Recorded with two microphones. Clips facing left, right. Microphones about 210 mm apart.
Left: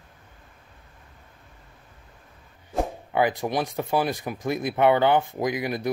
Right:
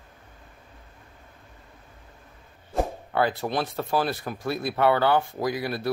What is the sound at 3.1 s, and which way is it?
Speech, 15° left (ahead or behind).